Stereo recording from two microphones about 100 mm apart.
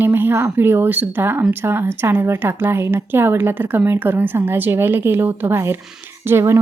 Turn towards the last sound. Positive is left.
turn(degrees=-25)  # may be behind; listen again after turning